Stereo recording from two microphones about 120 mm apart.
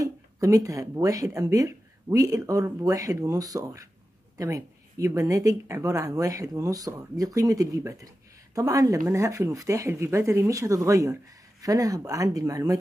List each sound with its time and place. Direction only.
0.0 s speech: 25° right (ahead or behind)